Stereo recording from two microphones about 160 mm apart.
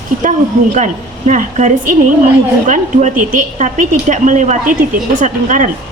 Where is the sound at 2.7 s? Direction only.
50° right (ahead or behind).